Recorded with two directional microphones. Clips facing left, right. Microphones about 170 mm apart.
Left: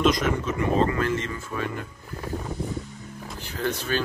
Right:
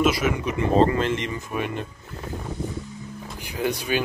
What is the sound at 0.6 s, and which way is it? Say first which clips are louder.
Speech: right 5 dB; 30° right (ahead or behind).